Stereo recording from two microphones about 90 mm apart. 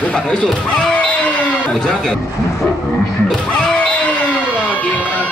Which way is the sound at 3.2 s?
10° left (ahead or behind).